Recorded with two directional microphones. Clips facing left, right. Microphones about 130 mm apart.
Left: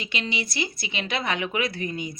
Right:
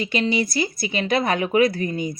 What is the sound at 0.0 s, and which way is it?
Speech, 40° right (ahead or behind).